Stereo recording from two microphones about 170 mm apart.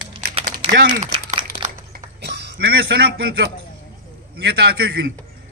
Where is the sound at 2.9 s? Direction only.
90° right.